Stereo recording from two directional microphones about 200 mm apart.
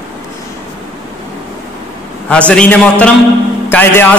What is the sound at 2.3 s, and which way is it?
A woman's voice, 5° left (ahead or behind).